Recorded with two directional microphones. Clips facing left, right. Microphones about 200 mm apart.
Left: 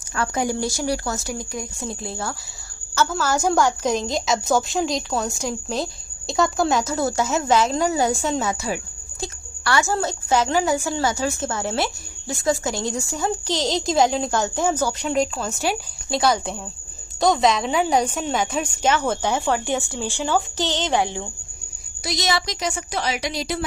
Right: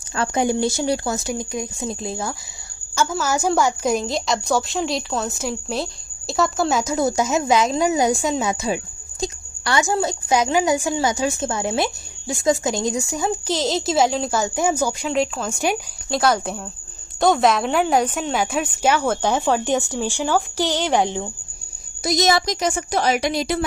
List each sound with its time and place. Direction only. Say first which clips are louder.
0.2 s a woman's voice: right 3 dB; 25° right (ahead or behind); by 15.5 s centre (ahead or behind)
15.5 s a woman's voice: right 3 dB; 15° right (ahead or behind)
16.0 s a woman's voice: right 1 dB; centre (ahead or behind); by 21.2 s 15° right (ahead or behind)
22.0 s a woman's voice: right 6 dB; 45° right (ahead or behind)